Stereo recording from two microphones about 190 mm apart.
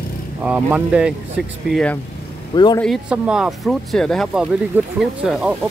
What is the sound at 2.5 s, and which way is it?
Speech, 20° left (ahead or behind).